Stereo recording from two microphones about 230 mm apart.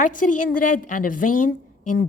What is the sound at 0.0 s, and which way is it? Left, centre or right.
A woman's voice, left.